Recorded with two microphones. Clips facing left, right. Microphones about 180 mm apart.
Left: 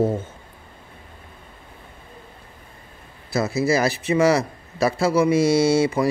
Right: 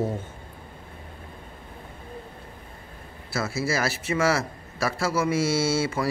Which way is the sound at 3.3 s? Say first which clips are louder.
Left 7 dB; 20° left (ahead or behind).